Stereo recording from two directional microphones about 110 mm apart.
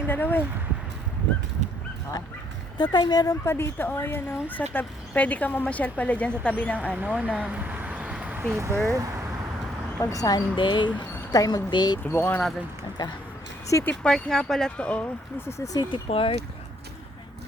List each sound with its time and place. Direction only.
0.1 s a sound: 20° left (ahead or behind)
2.7 s a woman's voice: 40° left (ahead or behind)
3.4 s speech: 20° left (ahead or behind)
6.9 s speech: 15° right (ahead or behind)
7.3 s a sound: 15° right (ahead or behind)
8.4 s speech: 25° right (ahead or behind)
10.0 s a woman's voice: 35° left (ahead or behind)
12.0 s speech: 20° left (ahead or behind)
13.0 s a woman's voice: 35° left (ahead or behind)
13.8 s speech: 5° left (ahead or behind)
15.4 s a woman's voice: 30° left (ahead or behind)
16.0 s speech: 55° left (ahead or behind)